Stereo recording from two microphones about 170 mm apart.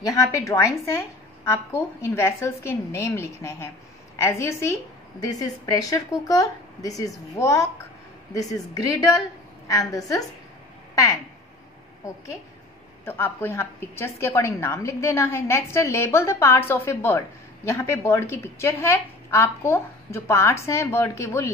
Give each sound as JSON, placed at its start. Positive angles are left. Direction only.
{"t": 0.0, "sound": "a woman's voice", "side_deg": 20}
{"t": 13.0, "sound": "a woman's voice", "side_deg": 15}